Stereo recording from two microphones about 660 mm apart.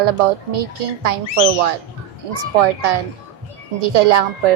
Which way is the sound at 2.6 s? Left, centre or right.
Right.